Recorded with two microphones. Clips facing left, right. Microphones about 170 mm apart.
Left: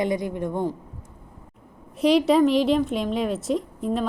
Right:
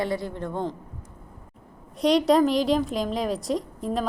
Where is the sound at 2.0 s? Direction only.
5° left (ahead or behind).